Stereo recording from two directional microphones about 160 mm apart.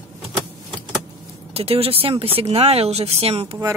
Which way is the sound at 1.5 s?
40° right (ahead or behind).